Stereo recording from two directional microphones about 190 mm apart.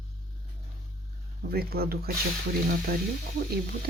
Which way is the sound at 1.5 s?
55° right (ahead or behind).